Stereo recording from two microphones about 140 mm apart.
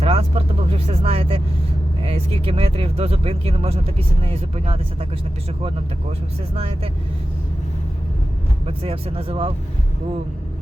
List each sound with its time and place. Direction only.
0.0 s speech: 45° right (ahead or behind)
6.6 s speech: 45° right (ahead or behind)
8.6 s speech: 45° right (ahead or behind)